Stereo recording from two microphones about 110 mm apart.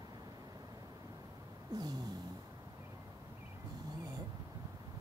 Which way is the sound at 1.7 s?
35° right (ahead or behind).